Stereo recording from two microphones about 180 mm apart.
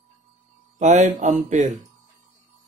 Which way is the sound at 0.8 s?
40° right (ahead or behind).